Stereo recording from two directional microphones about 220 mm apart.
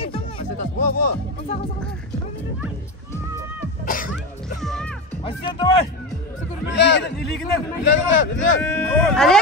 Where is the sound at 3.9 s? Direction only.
40° left (ahead or behind).